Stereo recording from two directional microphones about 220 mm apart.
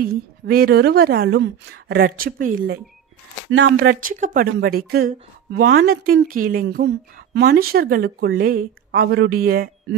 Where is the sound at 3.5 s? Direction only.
50° right (ahead or behind).